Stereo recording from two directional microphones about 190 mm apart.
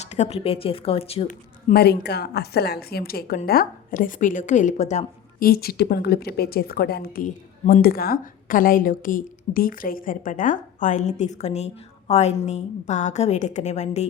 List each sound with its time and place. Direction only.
0.1 s speech: 35° left (ahead or behind)
1.7 s a woman's voice: 55° left (ahead or behind); by 5.5 s 40° left (ahead or behind)
5.5 s a woman's voice: 55° left (ahead or behind); by 14.1 s 35° left (ahead or behind)